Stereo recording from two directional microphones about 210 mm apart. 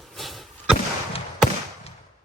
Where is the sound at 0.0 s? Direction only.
Centre (ahead or behind).